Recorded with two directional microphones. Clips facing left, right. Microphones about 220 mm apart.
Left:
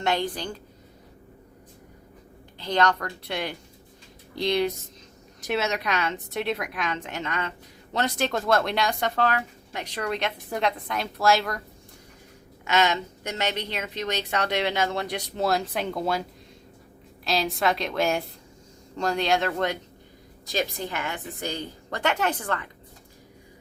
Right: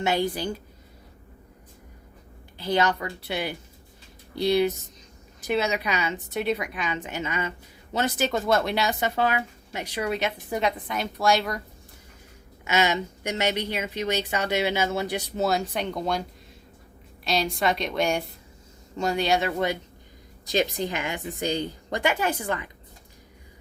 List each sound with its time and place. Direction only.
0.0 s speech: 5° right (ahead or behind)
2.6 s speech: 5° right (ahead or behind)
12.6 s speech: 10° right (ahead or behind)
17.2 s speech: centre (ahead or behind)
20.5 s speech: 20° right (ahead or behind)